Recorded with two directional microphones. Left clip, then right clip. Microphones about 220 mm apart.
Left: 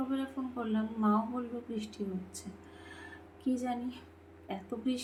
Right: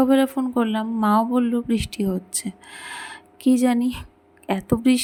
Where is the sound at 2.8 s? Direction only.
50° right (ahead or behind).